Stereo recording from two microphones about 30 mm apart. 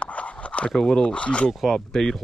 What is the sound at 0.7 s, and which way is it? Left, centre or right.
Speech, centre.